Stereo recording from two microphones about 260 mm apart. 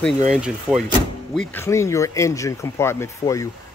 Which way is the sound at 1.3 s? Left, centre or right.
Centre.